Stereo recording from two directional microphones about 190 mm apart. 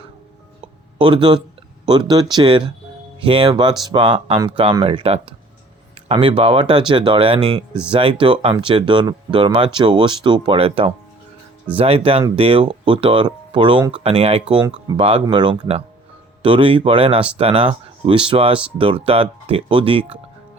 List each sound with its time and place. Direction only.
0.9 s speech: 25° right (ahead or behind)
7.7 s speech: 5° right (ahead or behind)
7.9 s speech: 30° right (ahead or behind)